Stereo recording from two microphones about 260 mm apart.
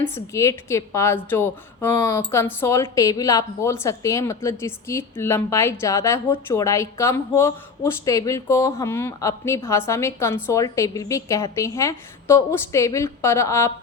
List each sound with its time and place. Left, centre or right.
0.0 s speech: centre